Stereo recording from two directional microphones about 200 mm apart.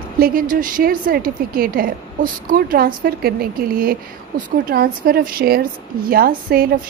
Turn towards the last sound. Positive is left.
turn(degrees=-45)  # may be behind; listen again after turning